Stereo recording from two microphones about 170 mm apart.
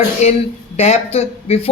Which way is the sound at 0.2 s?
40° left (ahead or behind).